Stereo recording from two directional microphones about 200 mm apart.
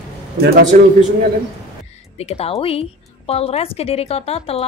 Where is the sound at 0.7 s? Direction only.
40° right (ahead or behind).